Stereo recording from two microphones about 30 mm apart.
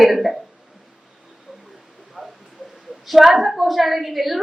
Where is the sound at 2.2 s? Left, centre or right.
Right.